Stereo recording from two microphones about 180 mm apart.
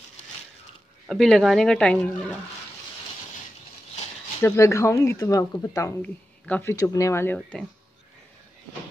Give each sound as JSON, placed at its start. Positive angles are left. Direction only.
{"t": 1.0, "sound": "speech", "side_deg": 0}
{"t": 4.4, "sound": "speech", "side_deg": 15}